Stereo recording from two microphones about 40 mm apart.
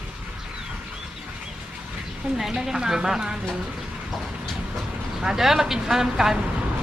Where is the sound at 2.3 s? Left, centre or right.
Centre.